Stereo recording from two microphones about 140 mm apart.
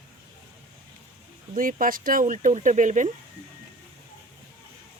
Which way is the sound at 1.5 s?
80° right.